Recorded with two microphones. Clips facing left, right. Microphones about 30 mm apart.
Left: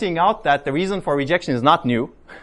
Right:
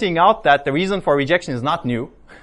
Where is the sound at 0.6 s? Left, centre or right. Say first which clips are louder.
Right 2 dB; right.